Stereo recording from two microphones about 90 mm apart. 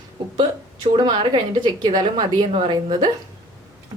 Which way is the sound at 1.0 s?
65° right (ahead or behind).